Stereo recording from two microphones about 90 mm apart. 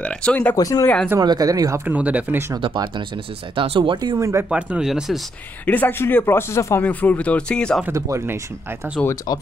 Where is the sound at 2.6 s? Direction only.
60° right (ahead or behind); by 4.0 s 75° right (ahead or behind).